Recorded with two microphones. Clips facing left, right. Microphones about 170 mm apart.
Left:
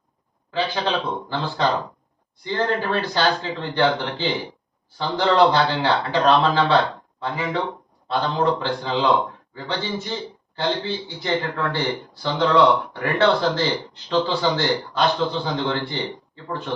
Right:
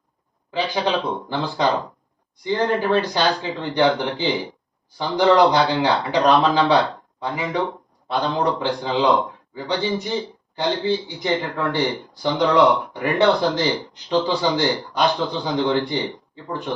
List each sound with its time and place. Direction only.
0.5 s speech: 15° right (ahead or behind)